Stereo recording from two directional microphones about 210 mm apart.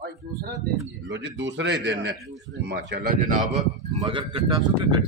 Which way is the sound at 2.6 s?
45° right (ahead or behind).